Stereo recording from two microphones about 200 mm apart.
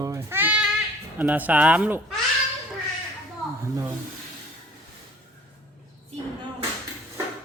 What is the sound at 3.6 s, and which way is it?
Speech, 15° right (ahead or behind).